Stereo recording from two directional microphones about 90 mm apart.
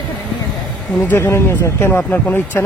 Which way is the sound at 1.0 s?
20° left (ahead or behind).